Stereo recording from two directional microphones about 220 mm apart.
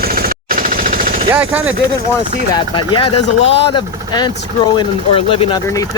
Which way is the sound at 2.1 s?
20° left (ahead or behind).